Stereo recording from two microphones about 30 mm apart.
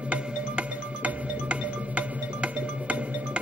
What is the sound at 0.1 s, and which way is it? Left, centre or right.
Music, right.